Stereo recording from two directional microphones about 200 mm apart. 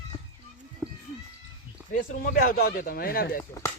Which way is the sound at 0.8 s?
10° left (ahead or behind).